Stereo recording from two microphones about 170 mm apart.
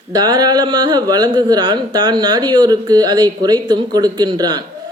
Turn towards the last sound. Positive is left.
turn(degrees=-25)  # may be behind; listen again after turning